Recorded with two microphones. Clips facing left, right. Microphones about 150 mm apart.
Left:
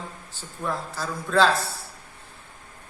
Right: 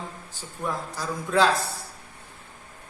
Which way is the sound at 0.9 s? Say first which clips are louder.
Left 1 dB; 15° right (ahead or behind).